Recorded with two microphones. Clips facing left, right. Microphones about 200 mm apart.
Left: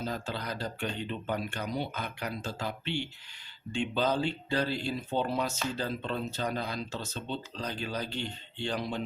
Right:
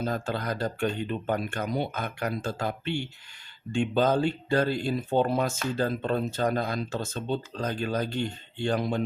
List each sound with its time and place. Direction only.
0.0 s speech: 50° right (ahead or behind)